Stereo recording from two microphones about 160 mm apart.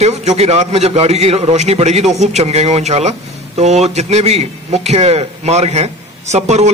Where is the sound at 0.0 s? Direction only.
45° right (ahead or behind).